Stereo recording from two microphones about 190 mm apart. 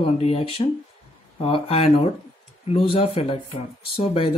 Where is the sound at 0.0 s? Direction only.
30° left (ahead or behind).